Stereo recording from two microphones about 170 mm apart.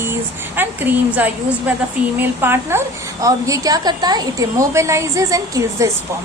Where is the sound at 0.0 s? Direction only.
15° right (ahead or behind).